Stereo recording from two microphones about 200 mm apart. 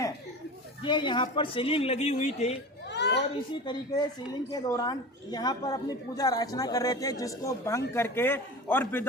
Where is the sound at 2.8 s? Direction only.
60° left (ahead or behind).